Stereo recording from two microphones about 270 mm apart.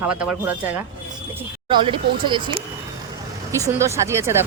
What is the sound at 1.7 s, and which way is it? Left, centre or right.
Speech, centre.